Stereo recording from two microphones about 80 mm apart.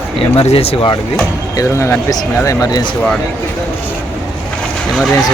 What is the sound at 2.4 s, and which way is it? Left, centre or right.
Speech, left.